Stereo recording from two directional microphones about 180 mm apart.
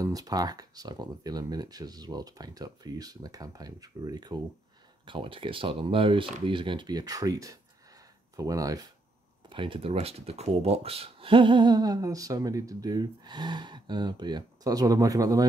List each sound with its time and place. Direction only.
0.0 s speech: 20° right (ahead or behind)